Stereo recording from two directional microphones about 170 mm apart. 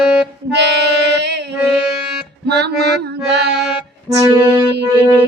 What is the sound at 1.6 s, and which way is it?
Music, 5° right (ahead or behind).